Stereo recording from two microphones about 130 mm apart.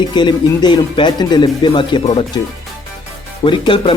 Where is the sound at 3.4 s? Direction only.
40° left (ahead or behind).